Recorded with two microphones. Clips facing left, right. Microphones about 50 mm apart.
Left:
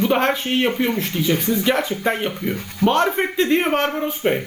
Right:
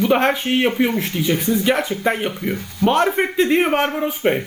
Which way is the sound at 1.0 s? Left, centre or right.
Centre.